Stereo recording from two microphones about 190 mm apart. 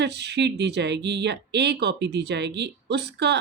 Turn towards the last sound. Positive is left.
turn(degrees=-60)  # may be behind; listen again after turning